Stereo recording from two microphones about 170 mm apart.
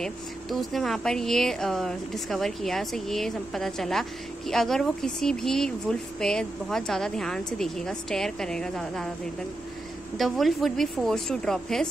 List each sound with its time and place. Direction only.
0.0 s speech: centre (ahead or behind)
10.1 s speech: centre (ahead or behind)